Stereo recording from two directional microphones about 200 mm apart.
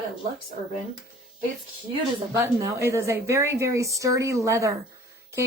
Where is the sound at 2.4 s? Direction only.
15° right (ahead or behind).